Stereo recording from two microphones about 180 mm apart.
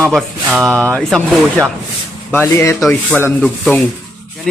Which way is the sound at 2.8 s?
Centre (ahead or behind).